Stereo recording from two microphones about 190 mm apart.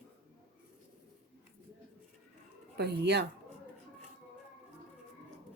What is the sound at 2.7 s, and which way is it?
Speech, 60° right (ahead or behind).